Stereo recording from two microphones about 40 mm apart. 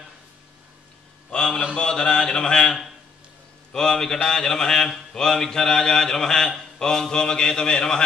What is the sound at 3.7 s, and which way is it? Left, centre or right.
A man's voice, centre.